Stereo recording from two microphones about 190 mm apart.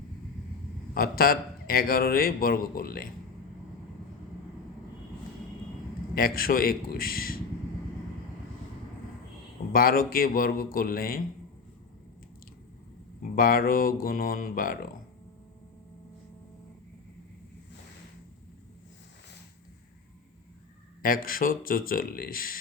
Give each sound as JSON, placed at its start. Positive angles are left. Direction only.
{"t": 0.9, "sound": "a man's voice", "side_deg": 50}
{"t": 6.1, "sound": "a man's voice", "side_deg": 50}
{"t": 9.7, "sound": "a man's voice", "side_deg": 50}
{"t": 13.3, "sound": "a man's voice", "side_deg": 50}
{"t": 21.0, "sound": "a man's voice", "side_deg": 50}